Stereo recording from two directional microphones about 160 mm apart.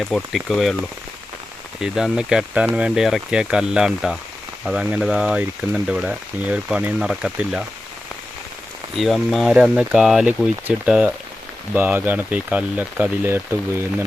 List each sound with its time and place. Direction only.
0.0 s speech: centre (ahead or behind)
1.8 s speech: 5° right (ahead or behind)
9.0 s speech: centre (ahead or behind)